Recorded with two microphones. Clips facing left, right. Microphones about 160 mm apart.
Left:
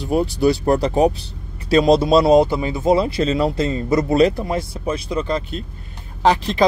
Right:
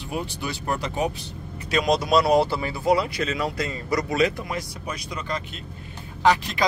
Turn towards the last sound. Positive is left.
turn(degrees=30)  # may be behind; listen again after turning